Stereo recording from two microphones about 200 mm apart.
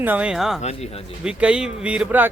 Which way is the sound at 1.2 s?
5° right (ahead or behind).